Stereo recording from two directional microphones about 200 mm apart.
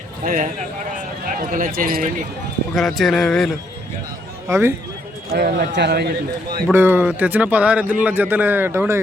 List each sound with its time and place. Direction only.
0.3 s speech: 40° right (ahead or behind)
2.7 s speech: centre (ahead or behind)
4.4 s a man's voice: 15° right (ahead or behind)
5.3 s speech: 50° right (ahead or behind)
6.7 s speech: 10° right (ahead or behind)